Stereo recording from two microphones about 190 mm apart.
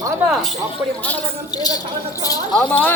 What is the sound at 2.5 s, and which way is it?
Speech, 5° left (ahead or behind).